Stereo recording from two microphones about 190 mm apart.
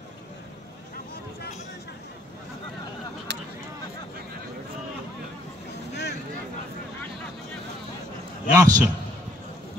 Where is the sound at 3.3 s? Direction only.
60° right (ahead or behind).